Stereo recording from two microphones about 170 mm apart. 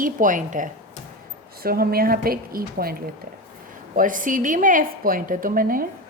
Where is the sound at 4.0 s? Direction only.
50° right (ahead or behind).